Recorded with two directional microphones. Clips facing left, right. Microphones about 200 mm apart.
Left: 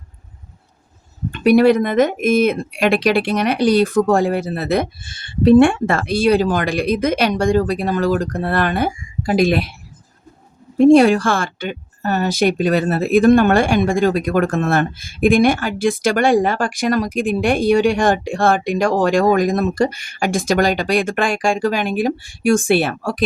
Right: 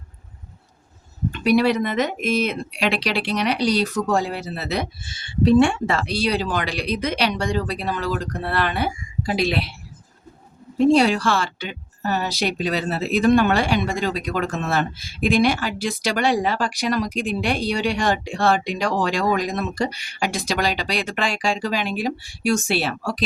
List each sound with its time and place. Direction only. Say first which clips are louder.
1.3 s speech: left 6 dB; 50° left (ahead or behind)
10.8 s speech: left 6 dB; 50° left (ahead or behind)